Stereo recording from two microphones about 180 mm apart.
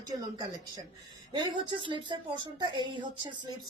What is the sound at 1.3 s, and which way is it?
A woman's voice, 25° right (ahead or behind).